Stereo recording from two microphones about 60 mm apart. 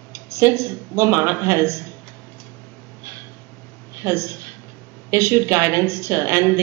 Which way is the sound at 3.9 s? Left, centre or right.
Right.